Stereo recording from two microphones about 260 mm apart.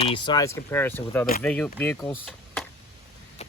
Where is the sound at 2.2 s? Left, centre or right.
Centre.